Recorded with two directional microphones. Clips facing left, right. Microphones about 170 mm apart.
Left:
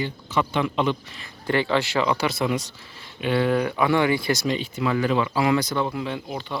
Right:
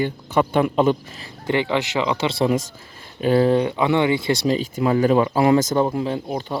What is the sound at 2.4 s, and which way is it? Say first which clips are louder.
Speech: right 5 dB; 35° right (ahead or behind).